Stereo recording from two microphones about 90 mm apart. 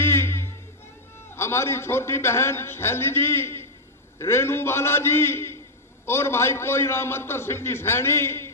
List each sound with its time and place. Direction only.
0.0 s music: 30° left (ahead or behind)
1.3 s a man's voice: 30° left (ahead or behind)